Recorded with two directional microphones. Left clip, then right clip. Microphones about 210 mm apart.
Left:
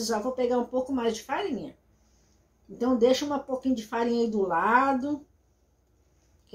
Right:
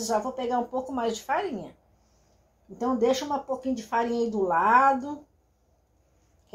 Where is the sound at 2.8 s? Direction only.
15° right (ahead or behind).